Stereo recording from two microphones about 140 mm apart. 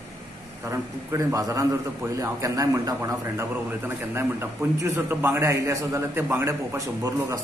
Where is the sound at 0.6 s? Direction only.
25° right (ahead or behind).